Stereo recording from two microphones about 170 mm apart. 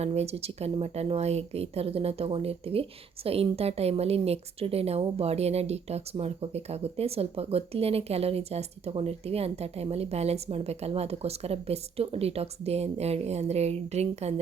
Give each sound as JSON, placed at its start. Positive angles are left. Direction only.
{"t": 0.0, "sound": "a woman's voice", "side_deg": -40}